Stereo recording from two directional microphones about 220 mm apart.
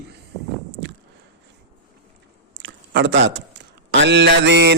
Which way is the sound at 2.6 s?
55° right (ahead or behind).